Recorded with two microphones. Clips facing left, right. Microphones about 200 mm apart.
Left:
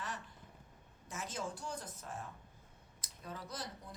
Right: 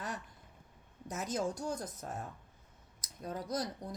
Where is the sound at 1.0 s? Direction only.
40° right (ahead or behind).